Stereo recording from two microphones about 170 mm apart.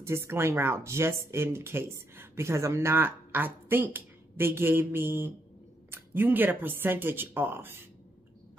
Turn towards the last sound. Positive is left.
turn(degrees=-15)  # may be behind; listen again after turning